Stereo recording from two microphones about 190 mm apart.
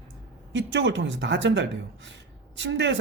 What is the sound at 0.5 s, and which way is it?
Speech, 70° right (ahead or behind).